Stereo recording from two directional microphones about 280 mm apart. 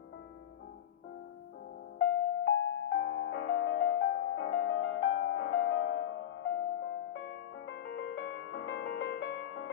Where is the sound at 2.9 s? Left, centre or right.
Left.